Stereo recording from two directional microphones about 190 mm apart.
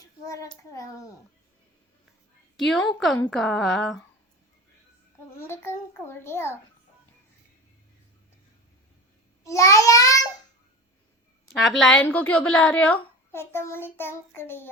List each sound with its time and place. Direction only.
0.7 s a woman's voice: 15° left (ahead or behind)
2.6 s humming: centre (ahead or behind)
5.4 s a woman's voice: 10° left (ahead or behind)
9.4 s a child's voice: 15° left (ahead or behind)
11.5 s a woman's voice: centre (ahead or behind)